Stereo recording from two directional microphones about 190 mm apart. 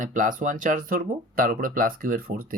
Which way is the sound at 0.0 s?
45° right (ahead or behind).